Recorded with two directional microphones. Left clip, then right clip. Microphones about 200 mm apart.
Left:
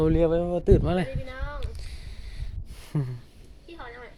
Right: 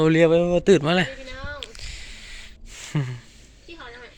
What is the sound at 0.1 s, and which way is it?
Speech, 25° right (ahead or behind).